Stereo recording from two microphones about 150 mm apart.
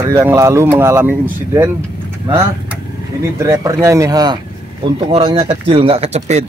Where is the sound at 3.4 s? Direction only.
20° right (ahead or behind).